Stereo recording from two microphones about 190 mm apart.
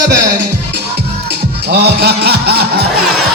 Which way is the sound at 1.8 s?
55° right (ahead or behind).